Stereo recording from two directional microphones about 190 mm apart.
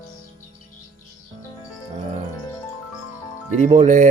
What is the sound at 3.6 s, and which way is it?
Speech, 40° right (ahead or behind).